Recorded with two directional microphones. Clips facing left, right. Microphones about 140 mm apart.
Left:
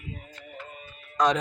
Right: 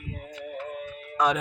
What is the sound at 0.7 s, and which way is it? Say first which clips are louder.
Music: right 10 dB; 70° right (ahead or behind).